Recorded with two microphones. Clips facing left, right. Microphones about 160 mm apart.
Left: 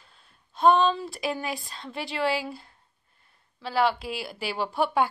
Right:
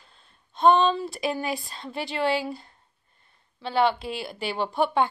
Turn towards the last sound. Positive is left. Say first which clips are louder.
# right 1 dB
turn(degrees=5)  # may be behind; listen again after turning